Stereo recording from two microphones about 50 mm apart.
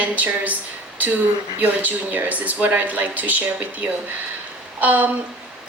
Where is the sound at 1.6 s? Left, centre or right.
Right.